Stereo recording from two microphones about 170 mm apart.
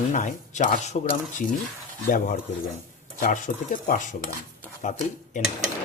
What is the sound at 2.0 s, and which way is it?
Speech, 50° left (ahead or behind).